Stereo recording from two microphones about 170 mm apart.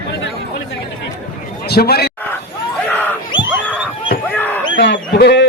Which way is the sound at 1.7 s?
65° left (ahead or behind).